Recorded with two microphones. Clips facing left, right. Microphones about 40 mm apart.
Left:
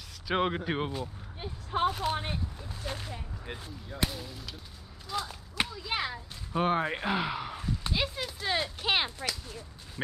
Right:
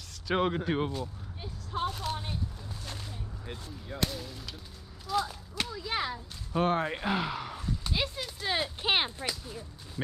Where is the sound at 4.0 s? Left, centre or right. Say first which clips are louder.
Even; centre.